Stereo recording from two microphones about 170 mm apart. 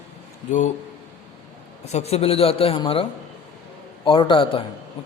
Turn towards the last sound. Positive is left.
turn(degrees=30)  # may be behind; listen again after turning